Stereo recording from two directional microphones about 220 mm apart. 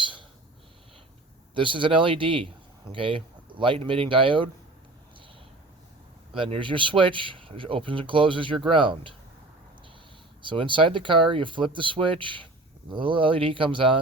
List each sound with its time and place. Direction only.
0.0 s a sound: 20° right (ahead or behind)
1.5 s speech: 20° right (ahead or behind)
6.3 s speech: 25° right (ahead or behind)
10.4 s speech: 20° right (ahead or behind)